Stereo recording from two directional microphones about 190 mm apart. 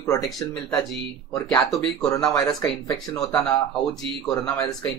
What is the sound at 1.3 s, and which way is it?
Speech, 20° left (ahead or behind).